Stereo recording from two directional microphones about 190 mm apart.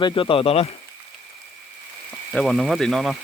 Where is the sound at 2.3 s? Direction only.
Centre (ahead or behind).